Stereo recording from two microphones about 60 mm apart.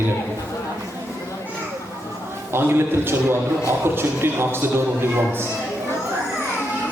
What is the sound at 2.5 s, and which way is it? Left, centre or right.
A man's voice, right.